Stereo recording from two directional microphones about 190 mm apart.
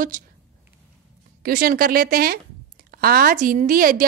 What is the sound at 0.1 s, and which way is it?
Speech, 45° right (ahead or behind).